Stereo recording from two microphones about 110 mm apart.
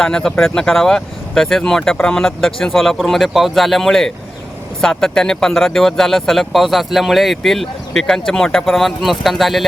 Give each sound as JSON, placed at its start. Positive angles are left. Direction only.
{"t": 0.0, "sound": "speech", "side_deg": 5}